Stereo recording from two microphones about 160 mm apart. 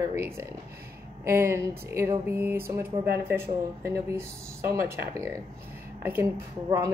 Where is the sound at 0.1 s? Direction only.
15° right (ahead or behind).